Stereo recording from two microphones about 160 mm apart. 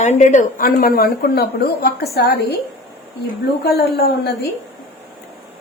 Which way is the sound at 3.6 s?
80° left.